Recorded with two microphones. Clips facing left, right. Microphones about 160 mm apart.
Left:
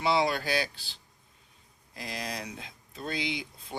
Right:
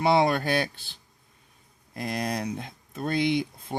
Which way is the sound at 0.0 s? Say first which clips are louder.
Right 5 dB; 55° right (ahead or behind).